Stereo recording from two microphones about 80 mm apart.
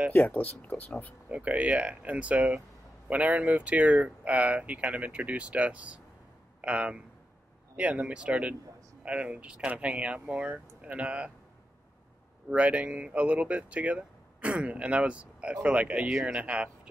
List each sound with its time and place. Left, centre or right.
0.1 s speech: centre
1.3 s speech: centre
12.4 s speech: centre